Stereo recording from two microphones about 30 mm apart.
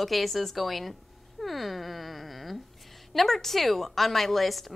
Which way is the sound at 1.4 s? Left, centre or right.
Centre.